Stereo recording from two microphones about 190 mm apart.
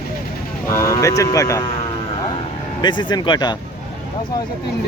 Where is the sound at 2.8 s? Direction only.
25° left (ahead or behind).